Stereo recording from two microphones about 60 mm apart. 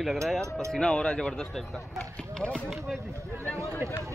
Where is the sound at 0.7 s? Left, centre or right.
Centre.